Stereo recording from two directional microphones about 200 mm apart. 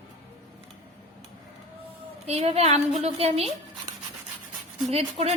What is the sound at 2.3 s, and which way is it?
A woman's voice, 30° right (ahead or behind).